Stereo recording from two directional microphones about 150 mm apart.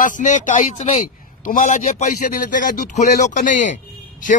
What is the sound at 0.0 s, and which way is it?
Speech, 55° left (ahead or behind).